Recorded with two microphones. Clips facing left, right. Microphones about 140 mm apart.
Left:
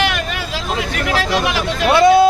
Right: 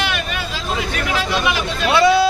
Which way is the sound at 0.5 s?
75° left (ahead or behind).